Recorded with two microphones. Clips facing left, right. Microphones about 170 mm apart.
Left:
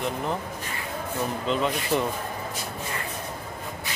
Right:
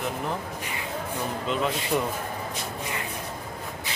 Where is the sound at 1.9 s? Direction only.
5° left (ahead or behind).